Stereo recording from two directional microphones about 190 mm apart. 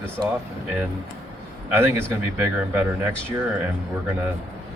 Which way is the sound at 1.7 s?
10° right (ahead or behind).